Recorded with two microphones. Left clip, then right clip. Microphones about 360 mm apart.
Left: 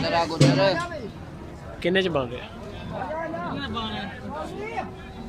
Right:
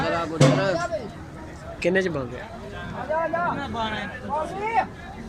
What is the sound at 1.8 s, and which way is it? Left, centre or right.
Speech, centre.